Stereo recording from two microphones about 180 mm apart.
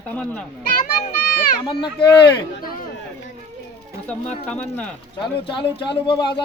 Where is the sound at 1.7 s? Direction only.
25° left (ahead or behind).